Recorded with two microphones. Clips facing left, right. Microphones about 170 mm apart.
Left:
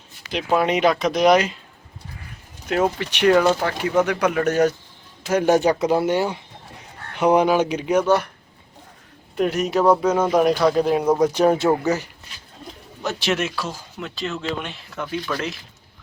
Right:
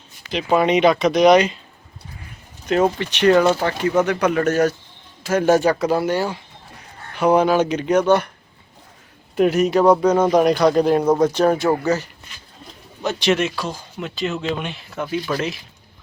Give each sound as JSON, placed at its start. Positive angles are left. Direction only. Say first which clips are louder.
{"t": 0.3, "sound": "speech", "louder": "right 3 dB", "side_deg": 5}
{"t": 2.6, "sound": "speech", "louder": "right 3 dB", "side_deg": 5}
{"t": 9.3, "sound": "speech", "louder": "right 4 dB", "side_deg": -5}
{"t": 11.2, "sound": "speech", "louder": "right 1 dB", "side_deg": 15}
{"t": 13.0, "sound": "speech", "louder": "right 4 dB", "side_deg": 0}